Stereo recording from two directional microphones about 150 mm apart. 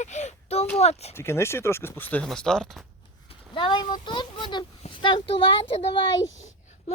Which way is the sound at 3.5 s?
30° left (ahead or behind).